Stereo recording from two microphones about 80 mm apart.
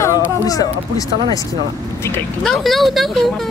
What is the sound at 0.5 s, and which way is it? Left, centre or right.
Speech, left.